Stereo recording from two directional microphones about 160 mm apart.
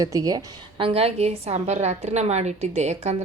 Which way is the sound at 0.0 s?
20° right (ahead or behind).